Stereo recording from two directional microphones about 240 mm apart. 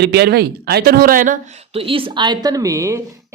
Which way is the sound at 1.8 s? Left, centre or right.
Right.